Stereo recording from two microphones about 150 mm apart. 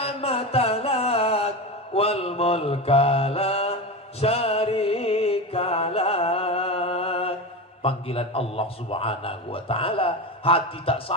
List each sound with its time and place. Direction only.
0.0 s mantra: 40° left (ahead or behind)
4.2 s music: 40° left (ahead or behind)
7.8 s a man's voice: 40° left (ahead or behind)